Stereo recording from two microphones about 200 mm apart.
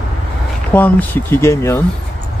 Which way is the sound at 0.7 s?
10° left (ahead or behind).